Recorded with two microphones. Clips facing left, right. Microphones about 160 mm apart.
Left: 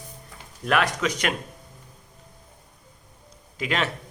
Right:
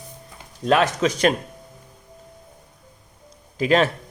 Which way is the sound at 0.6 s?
25° right (ahead or behind).